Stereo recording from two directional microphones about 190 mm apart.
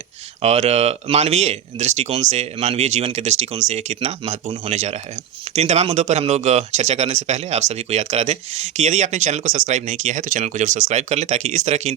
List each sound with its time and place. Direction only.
0.4 s speech: 35° right (ahead or behind)